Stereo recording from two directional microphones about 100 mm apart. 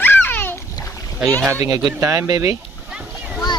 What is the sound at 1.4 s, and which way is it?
Speech, 30° right (ahead or behind).